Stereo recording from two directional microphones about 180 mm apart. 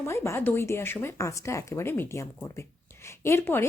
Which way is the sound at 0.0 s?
15° left (ahead or behind).